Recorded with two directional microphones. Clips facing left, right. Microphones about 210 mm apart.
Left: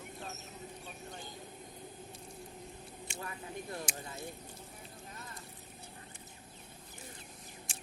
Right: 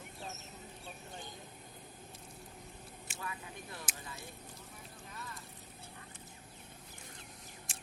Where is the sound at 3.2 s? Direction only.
40° left (ahead or behind).